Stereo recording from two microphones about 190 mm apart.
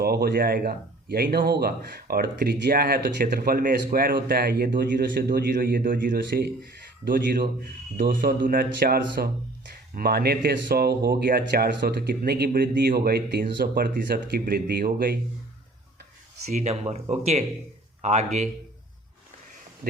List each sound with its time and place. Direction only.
0.0 s speech: 55° right (ahead or behind)
6.1 s speech: 60° right (ahead or behind)
16.5 s speech: 35° right (ahead or behind)
19.8 s insect: 50° right (ahead or behind)